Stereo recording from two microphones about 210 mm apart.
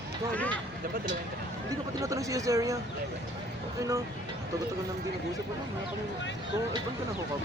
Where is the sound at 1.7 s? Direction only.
15° right (ahead or behind).